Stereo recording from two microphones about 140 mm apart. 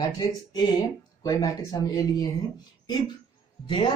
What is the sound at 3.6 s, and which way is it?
Speech, 35° left (ahead or behind).